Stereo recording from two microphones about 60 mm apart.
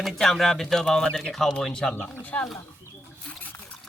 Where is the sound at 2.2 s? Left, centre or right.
Left.